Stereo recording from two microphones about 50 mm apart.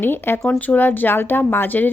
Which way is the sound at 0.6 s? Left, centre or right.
Left.